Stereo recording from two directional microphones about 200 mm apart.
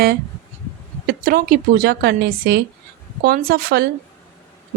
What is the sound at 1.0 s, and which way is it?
A woman's voice, 50° right (ahead or behind).